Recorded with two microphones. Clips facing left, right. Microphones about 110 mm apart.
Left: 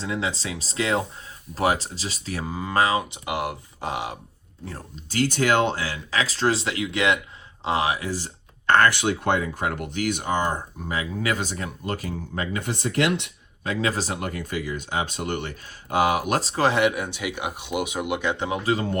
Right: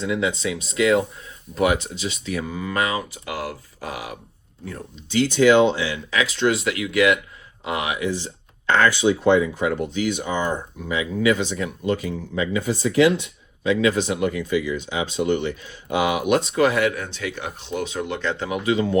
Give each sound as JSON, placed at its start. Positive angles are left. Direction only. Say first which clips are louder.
{"t": 0.0, "sound": "speech", "louder": "right 5 dB", "side_deg": 30}
{"t": 5.0, "sound": "speech", "louder": "right 6 dB", "side_deg": 45}
{"t": 13.7, "sound": "speech", "louder": "right 6 dB", "side_deg": 35}
{"t": 16.9, "sound": "speech", "louder": "even", "side_deg": 15}
{"t": 18.6, "sound": "speech", "louder": "right 4 dB", "side_deg": 40}